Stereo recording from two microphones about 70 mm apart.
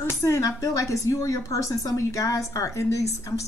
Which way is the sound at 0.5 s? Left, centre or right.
Left.